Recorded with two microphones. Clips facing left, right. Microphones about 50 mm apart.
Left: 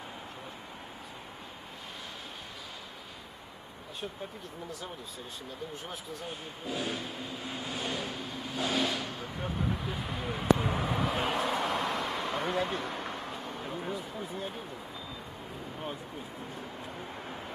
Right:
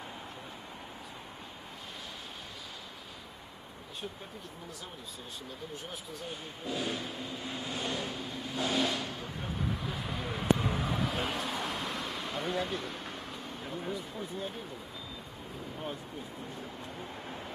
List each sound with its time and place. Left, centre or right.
6.6 s vehicle: centre
9.4 s a sound: centre
11.5 s vehicle: left
13.1 s vehicle: centre
16.8 s vehicle: centre